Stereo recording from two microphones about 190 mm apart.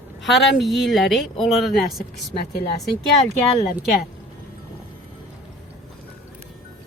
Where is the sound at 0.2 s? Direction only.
Centre (ahead or behind).